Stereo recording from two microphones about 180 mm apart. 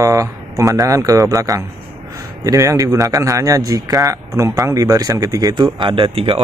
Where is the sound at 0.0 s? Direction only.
20° right (ahead or behind).